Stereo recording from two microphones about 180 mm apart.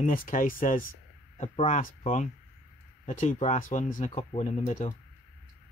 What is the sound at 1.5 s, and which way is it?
Speech, 35° left (ahead or behind).